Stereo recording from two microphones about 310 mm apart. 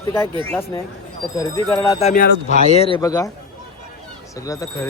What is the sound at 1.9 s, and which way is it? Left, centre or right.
Speech, left.